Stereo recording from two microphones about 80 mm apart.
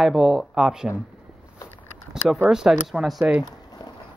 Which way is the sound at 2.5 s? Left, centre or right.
Centre.